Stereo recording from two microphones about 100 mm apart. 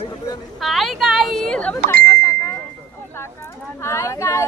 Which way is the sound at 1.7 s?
30° left (ahead or behind).